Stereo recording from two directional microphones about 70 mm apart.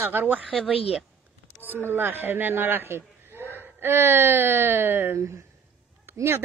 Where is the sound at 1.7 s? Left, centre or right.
Right.